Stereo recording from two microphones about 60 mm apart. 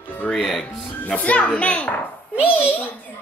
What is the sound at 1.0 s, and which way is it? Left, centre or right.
Speech, left.